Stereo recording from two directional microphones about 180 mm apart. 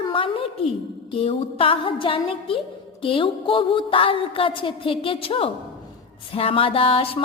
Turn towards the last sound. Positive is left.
turn(degrees=30)  # may be behind; listen again after turning